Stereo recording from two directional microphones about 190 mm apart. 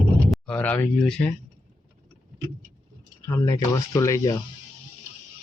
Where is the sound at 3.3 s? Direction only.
15° left (ahead or behind).